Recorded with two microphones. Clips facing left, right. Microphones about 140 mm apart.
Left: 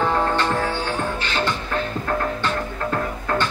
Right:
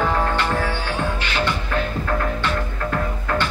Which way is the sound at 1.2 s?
30° left (ahead or behind).